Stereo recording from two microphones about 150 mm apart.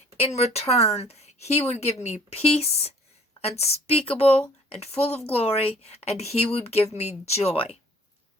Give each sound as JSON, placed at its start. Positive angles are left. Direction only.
{"t": 0.2, "sound": "a woman's voice", "side_deg": 45}